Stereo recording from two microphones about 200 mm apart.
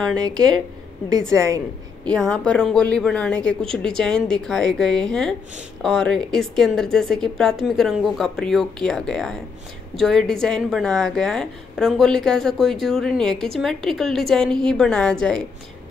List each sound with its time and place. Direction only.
1.3 s a woman's voice: 15° right (ahead or behind)
2.0 s a woman's voice: 5° left (ahead or behind)